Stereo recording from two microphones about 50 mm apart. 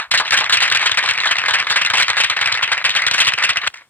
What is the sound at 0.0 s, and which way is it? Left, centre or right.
Firecracker, left.